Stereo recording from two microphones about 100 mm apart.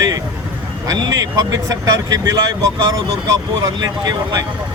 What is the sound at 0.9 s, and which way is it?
Speech, 40° right (ahead or behind).